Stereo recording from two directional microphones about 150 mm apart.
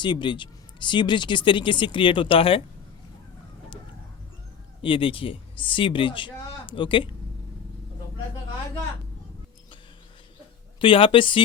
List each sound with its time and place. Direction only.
0.0 s speech: 30° left (ahead or behind)
4.8 s speech: 35° left (ahead or behind)
10.8 s speech: 35° left (ahead or behind)